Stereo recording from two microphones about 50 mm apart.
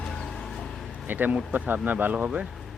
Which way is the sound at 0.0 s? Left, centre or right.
Centre.